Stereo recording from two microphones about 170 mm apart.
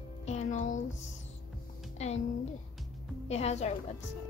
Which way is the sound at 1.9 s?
40° left (ahead or behind).